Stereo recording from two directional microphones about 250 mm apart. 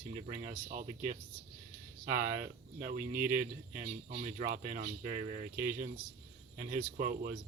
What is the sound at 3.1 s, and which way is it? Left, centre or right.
Speech, centre.